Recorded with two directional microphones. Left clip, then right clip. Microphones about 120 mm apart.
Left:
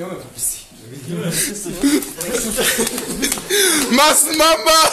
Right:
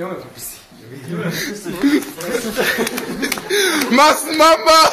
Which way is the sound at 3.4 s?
10° left (ahead or behind).